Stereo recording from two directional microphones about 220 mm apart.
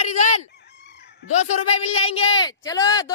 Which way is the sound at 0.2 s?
30° left (ahead or behind).